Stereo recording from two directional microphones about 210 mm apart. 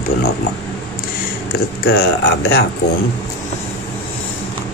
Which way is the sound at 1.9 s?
50° left (ahead or behind).